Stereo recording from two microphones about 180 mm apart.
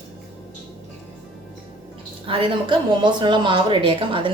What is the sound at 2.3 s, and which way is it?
A woman's voice, 30° right (ahead or behind).